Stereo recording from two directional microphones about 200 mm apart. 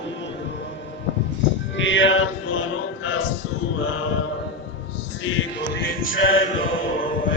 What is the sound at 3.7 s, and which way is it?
Male singing, 90° left.